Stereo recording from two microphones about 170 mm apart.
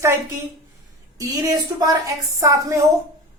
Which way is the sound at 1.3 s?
20° right (ahead or behind).